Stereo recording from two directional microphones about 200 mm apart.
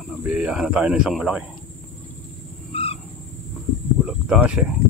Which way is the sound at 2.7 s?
30° left (ahead or behind).